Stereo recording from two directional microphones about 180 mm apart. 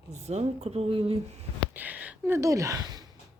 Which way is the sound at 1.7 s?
10° right (ahead or behind).